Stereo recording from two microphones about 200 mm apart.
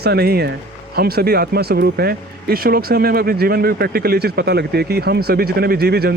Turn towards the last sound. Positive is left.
turn(degrees=-50)  # may be behind; listen again after turning